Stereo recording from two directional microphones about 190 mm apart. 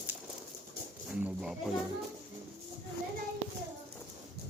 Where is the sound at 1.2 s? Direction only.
5° right (ahead or behind).